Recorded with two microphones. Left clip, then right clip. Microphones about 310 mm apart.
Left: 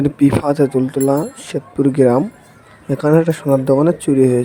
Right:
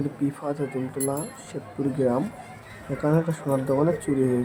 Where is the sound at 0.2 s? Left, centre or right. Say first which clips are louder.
Left 16 dB; left.